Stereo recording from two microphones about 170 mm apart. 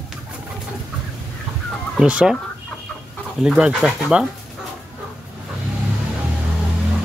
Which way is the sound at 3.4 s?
5° right (ahead or behind).